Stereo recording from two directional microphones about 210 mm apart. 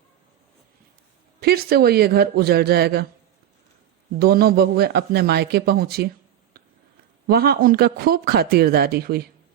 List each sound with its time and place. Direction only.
1.4 s speech: 50° right (ahead or behind)
4.2 s speech: 45° right (ahead or behind)
7.3 s speech: 45° right (ahead or behind)